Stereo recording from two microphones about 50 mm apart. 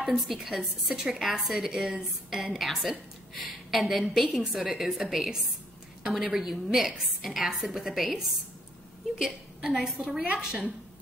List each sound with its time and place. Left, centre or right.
0.0 s a woman's voice: centre
9.2 s a woman's voice: centre